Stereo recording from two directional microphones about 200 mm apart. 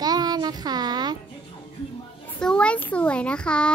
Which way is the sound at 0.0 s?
20° right (ahead or behind).